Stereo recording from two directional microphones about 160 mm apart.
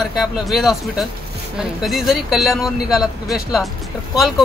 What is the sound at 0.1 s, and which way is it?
Speech, centre (ahead or behind).